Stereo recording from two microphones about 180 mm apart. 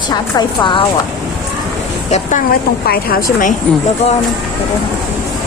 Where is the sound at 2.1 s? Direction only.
45° left (ahead or behind).